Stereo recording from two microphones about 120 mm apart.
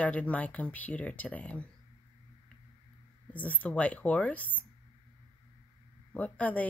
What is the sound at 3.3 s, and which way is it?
Speech, 15° left (ahead or behind).